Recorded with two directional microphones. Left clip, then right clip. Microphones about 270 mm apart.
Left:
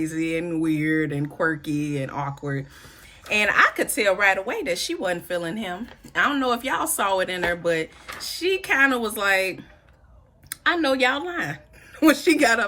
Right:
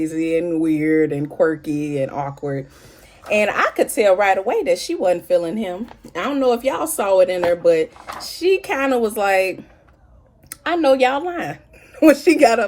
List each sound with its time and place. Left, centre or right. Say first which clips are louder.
0.1 s speech: right 6 dB; centre
1.7 s speech: right 4 dB; centre
2.0 s speech: right 5 dB; centre
9.2 s speech: right 3 dB; centre
10.5 s a woman's voice: right 5 dB; centre